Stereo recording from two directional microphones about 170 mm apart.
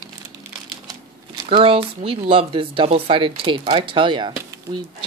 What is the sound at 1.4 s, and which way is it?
Speech, 30° right (ahead or behind).